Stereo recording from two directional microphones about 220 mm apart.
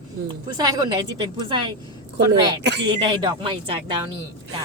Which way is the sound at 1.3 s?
20° right (ahead or behind).